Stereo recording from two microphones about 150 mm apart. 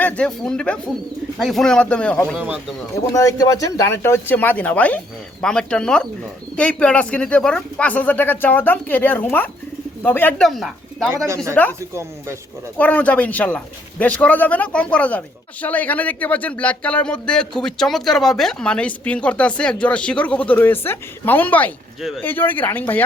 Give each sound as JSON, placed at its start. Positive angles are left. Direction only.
{"t": 0.0, "sound": "speech", "side_deg": 5}
{"t": 2.4, "sound": "speech", "side_deg": -5}
{"t": 3.1, "sound": "speech", "side_deg": 20}
{"t": 10.4, "sound": "speech", "side_deg": 0}
{"t": 11.8, "sound": "speech", "side_deg": -15}
{"t": 12.7, "sound": "speech", "side_deg": 10}